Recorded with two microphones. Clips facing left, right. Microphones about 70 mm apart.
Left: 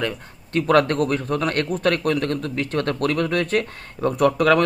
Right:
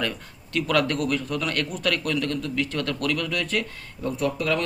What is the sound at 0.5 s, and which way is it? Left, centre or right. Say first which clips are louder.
A man's voice: left 6 dB; left.